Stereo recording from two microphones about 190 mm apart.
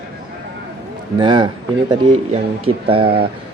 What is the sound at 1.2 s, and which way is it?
Speech, 25° right (ahead or behind).